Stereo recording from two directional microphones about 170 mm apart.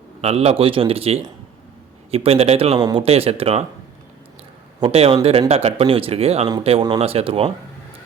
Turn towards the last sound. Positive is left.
turn(degrees=-35)  # may be behind; listen again after turning